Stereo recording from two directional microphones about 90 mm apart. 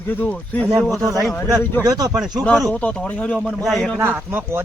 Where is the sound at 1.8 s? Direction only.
45° right (ahead or behind).